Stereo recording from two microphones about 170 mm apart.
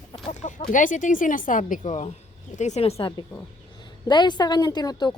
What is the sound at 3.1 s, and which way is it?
A woman's voice, 20° left (ahead or behind).